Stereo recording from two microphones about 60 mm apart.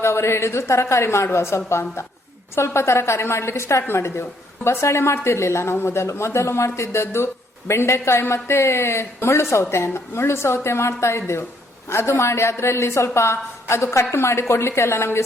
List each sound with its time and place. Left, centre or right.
0.0 s a woman's voice: left